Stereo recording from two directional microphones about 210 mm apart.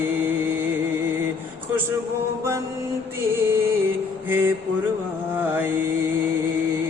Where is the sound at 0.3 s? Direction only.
10° right (ahead or behind).